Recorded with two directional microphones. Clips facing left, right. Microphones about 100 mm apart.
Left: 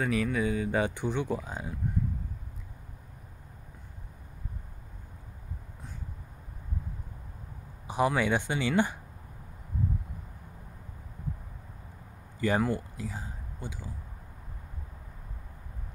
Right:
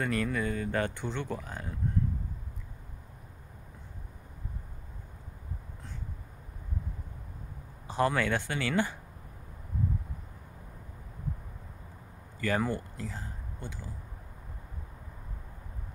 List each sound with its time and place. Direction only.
0.0 s speech: 5° left (ahead or behind)
7.8 s speech: 15° left (ahead or behind)
12.4 s speech: 20° left (ahead or behind)